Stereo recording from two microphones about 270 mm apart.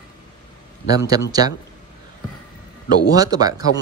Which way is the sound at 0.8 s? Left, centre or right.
Centre.